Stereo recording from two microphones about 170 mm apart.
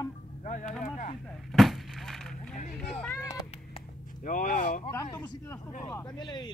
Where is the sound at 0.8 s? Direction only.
50° left (ahead or behind).